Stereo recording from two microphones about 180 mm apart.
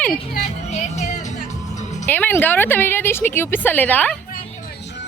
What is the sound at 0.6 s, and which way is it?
Music, 40° left (ahead or behind).